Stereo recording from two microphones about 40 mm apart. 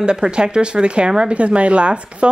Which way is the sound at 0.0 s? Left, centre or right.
Right.